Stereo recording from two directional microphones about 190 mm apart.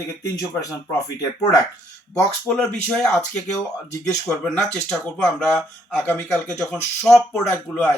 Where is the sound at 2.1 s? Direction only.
5° left (ahead or behind).